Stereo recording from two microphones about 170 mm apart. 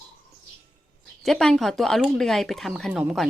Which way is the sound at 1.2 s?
Centre (ahead or behind).